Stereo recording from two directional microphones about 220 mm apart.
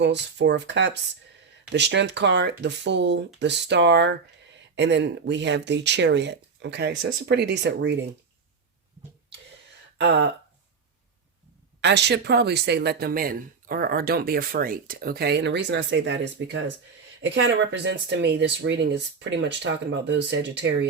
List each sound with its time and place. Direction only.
0.0 s speech: 50° right (ahead or behind)
10.0 s speech: 50° right (ahead or behind)
11.8 s speech: 50° right (ahead or behind)